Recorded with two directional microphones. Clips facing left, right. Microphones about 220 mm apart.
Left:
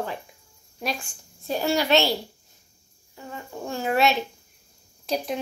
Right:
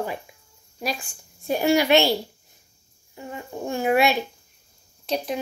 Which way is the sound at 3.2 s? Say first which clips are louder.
Right 3 dB; 15° right (ahead or behind).